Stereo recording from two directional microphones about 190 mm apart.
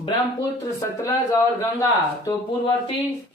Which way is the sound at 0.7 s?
15° left (ahead or behind).